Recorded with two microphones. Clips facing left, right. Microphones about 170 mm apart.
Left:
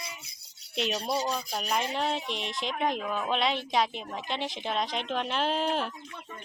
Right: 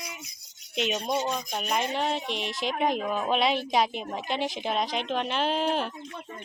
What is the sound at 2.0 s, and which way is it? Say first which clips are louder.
Speech: right 2 dB; centre (ahead or behind).